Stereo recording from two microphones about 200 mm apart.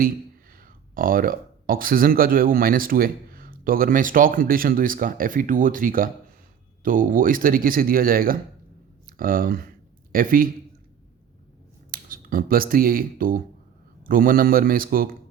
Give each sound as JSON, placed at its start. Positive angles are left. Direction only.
{"t": 0.5, "sound": "a man's voice", "side_deg": -45}
{"t": 11.9, "sound": "speech", "side_deg": -45}